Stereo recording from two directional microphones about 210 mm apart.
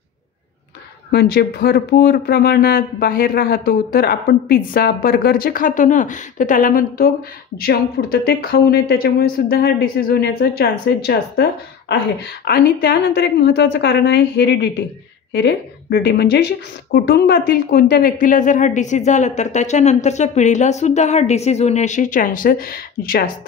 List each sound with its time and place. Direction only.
1.1 s speech: 45° left (ahead or behind)